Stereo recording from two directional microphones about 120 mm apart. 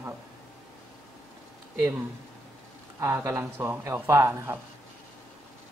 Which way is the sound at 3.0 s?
20° right (ahead or behind).